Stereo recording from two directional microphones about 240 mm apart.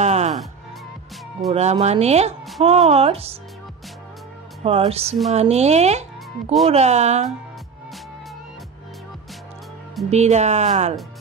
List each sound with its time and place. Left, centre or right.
0.0 s music: right
1.5 s speech: right
4.6 s speech: right
10.1 s speech: right